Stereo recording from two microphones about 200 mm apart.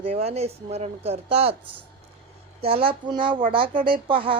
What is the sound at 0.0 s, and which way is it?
Speech, 30° right (ahead or behind).